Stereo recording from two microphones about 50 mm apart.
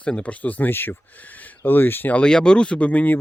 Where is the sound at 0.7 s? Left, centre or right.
Left.